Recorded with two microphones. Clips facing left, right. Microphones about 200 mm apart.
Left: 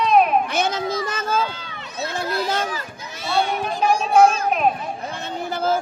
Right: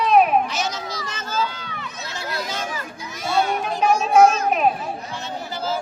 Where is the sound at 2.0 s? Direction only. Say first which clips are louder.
Left 9 dB; 55° left (ahead or behind).